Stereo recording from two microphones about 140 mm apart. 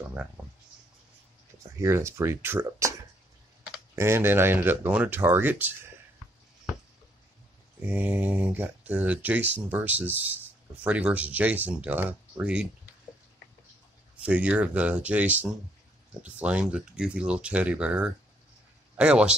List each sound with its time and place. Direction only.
1.8 s speech: 20° right (ahead or behind)
7.8 s speech: 10° right (ahead or behind)
14.2 s speech: 10° right (ahead or behind)